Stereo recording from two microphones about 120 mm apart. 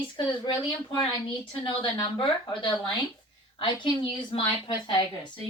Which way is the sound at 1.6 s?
40° left (ahead or behind).